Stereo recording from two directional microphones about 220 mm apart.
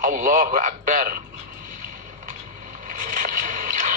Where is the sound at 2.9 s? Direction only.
40° right (ahead or behind).